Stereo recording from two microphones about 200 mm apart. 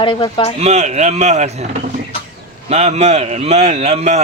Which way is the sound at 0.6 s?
35° right (ahead or behind).